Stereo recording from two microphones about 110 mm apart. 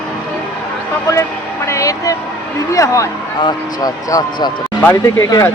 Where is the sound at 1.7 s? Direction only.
30° left (ahead or behind).